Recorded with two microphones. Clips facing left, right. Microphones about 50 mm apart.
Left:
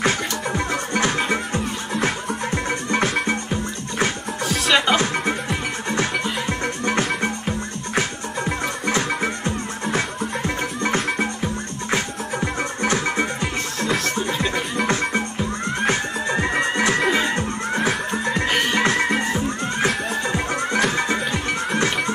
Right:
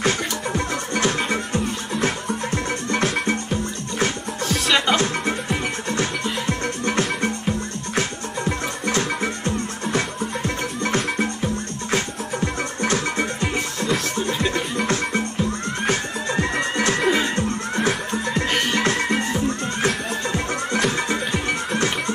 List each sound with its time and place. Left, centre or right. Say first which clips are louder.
0.0 s music: left 1 dB; centre
9.2 s music: even; centre
11.9 s music: even; centre
13.2 s music: even; centre